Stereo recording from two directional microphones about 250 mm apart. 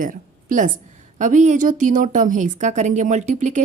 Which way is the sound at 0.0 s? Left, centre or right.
Right.